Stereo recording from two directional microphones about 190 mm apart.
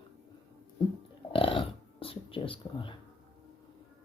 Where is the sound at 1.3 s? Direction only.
30° left (ahead or behind).